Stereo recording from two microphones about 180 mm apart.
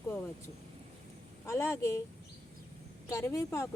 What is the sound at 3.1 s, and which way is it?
Speech, 15° left (ahead or behind).